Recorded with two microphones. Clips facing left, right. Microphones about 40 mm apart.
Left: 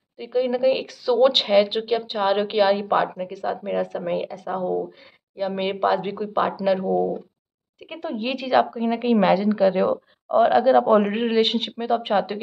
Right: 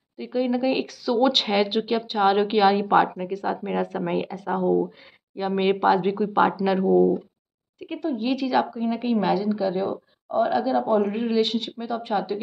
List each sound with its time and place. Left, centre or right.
0.2 s speech: centre
1.0 s speech: centre
4.6 s speech: centre
8.0 s a woman's voice: left
9.1 s a woman's voice: left
9.5 s speech: left
10.5 s a woman's voice: left
10.8 s a woman's voice: left
11.1 s speech: left